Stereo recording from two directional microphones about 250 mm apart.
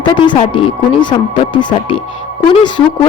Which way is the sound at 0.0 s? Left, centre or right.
Centre.